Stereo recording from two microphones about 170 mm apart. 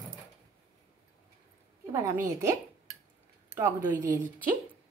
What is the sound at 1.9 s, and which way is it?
Speech, 15° right (ahead or behind).